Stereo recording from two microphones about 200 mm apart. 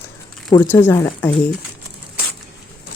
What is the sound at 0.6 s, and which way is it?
Speech, 10° left (ahead or behind).